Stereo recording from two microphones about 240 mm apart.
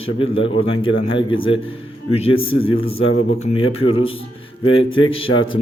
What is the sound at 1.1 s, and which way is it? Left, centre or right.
Speech, left.